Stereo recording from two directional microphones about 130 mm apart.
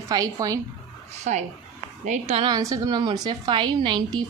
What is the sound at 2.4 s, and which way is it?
A woman's voice, 30° right (ahead or behind).